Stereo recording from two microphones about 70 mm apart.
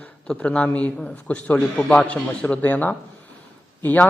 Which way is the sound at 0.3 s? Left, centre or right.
Centre.